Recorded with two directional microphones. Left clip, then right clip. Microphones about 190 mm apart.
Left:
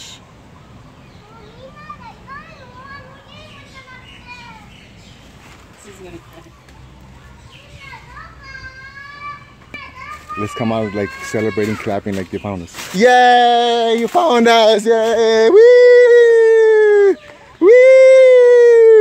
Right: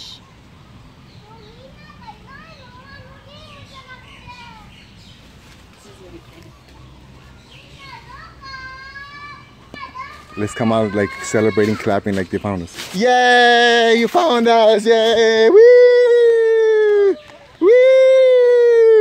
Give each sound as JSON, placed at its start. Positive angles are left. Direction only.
{"t": 10.4, "sound": "speech", "side_deg": -5}
{"t": 12.9, "sound": "speech", "side_deg": 20}
{"t": 13.4, "sound": "speech", "side_deg": -15}
{"t": 14.4, "sound": "speech", "side_deg": 20}
{"t": 14.9, "sound": "speech", "side_deg": -10}
{"t": 15.3, "sound": "howl", "side_deg": 10}